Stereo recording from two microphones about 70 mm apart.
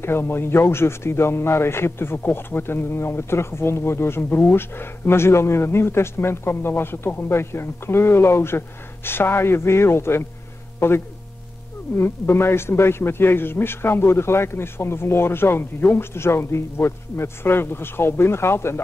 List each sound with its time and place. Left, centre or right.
0.0 s speech: left